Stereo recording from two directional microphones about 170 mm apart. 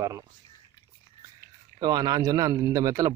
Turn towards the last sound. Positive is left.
turn(degrees=-20)  # may be behind; listen again after turning